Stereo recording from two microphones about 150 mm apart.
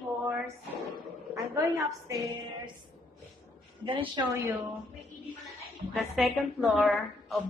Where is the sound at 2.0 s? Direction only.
20° right (ahead or behind).